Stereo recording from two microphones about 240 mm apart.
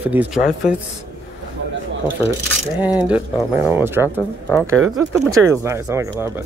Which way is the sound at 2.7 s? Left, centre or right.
Centre.